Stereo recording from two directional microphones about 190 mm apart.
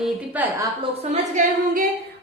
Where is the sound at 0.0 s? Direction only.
10° right (ahead or behind).